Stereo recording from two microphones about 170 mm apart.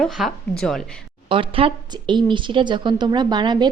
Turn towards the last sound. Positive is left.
turn(degrees=-25)  # may be behind; listen again after turning